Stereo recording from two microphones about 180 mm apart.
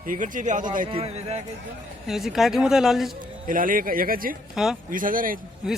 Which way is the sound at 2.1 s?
Centre (ahead or behind).